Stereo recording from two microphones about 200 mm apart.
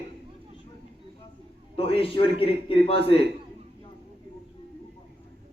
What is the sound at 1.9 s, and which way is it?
Speech, 25° left (ahead or behind).